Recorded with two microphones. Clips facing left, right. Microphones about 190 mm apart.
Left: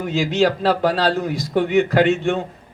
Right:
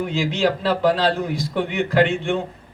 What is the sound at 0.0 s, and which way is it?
Speech, 55° right (ahead or behind).